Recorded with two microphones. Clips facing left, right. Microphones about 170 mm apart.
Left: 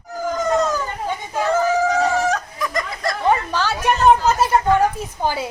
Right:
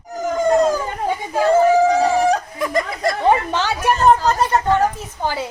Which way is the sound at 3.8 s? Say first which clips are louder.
Even; 5° left (ahead or behind).